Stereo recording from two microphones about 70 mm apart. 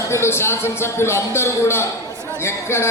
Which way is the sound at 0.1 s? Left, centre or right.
Left.